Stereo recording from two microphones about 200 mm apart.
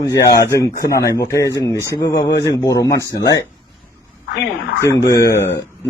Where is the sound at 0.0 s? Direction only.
20° left (ahead or behind).